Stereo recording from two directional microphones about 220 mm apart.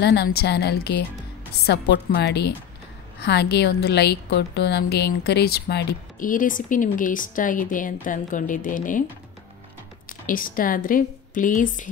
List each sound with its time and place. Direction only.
0.0 s a woman's voice: 50° left (ahead or behind)
10.0 s a woman's voice: 40° left (ahead or behind)